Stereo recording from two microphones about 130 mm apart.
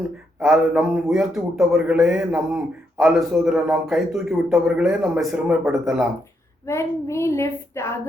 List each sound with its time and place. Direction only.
0.3 s a man's voice: 5° right (ahead or behind)
6.7 s speech: 20° left (ahead or behind)